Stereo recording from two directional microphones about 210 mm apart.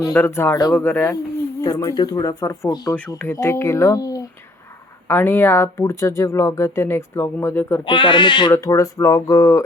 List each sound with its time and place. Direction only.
0.1 s speech: 10° left (ahead or behind)
7.9 s speech: 20° left (ahead or behind)